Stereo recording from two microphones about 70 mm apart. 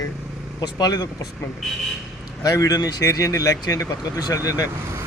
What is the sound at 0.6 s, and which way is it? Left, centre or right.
Speech, left.